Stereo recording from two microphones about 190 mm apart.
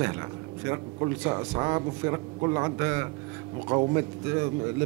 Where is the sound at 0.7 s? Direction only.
15° right (ahead or behind).